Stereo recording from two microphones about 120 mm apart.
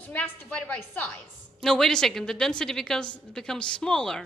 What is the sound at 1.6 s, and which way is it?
A woman's voice, 5° left (ahead or behind).